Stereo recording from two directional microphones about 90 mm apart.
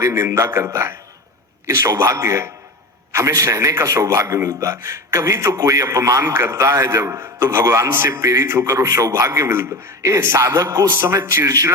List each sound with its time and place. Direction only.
0.0 s a man's voice: 30° right (ahead or behind)